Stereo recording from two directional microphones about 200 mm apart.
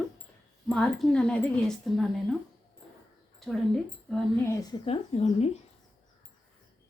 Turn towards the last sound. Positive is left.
turn(degrees=30)  # may be behind; listen again after turning